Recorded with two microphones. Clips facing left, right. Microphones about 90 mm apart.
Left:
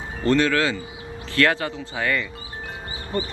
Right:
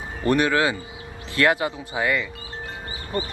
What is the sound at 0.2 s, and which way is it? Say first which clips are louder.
Speech: even; 15° right (ahead or behind).